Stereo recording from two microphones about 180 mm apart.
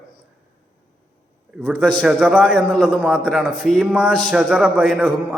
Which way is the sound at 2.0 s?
5° right (ahead or behind).